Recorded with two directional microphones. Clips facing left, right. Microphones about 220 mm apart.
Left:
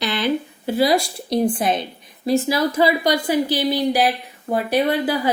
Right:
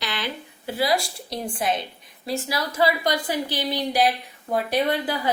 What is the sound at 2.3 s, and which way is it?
A woman's voice, 20° left (ahead or behind).